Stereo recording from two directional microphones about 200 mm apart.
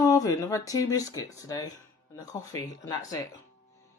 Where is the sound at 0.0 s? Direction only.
15° left (ahead or behind).